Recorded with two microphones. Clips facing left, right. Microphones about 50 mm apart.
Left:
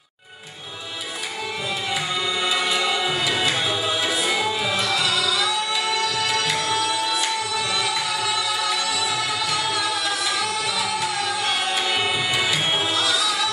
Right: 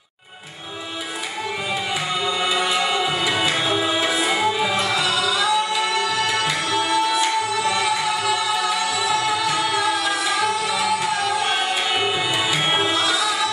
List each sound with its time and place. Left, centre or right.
2.2 s music: right
5.9 s tabla: right
7.8 s music: centre